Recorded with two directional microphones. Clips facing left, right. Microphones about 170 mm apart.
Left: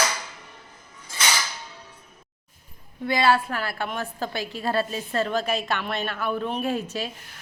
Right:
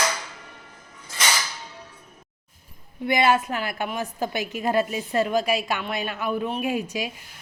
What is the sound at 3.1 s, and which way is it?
A woman's voice, 20° right (ahead or behind).